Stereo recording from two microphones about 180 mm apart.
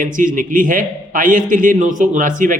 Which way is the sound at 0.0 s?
45° right (ahead or behind).